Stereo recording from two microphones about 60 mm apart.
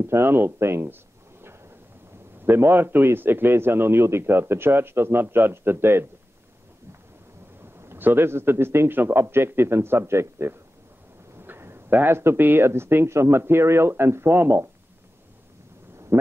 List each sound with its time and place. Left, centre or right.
0.0 s a man's voice: right
2.4 s a man's voice: right
7.9 s a man's voice: right
11.3 s a sound: right
11.9 s a man's voice: right
16.1 s a sound: right